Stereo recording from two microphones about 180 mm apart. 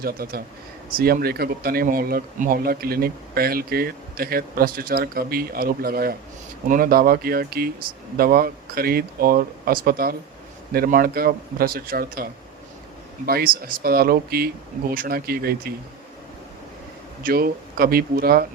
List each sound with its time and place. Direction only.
0.0 s speech: 55° right (ahead or behind)
17.2 s speech: 55° right (ahead or behind)